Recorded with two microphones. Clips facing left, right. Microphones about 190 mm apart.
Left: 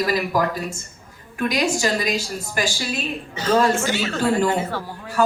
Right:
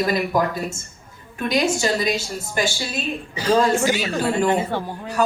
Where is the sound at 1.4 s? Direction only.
20° right (ahead or behind).